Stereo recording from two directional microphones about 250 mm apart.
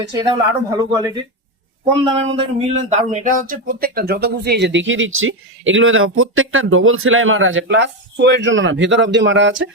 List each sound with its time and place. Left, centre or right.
0.2 s speech: centre
2.3 s speech: right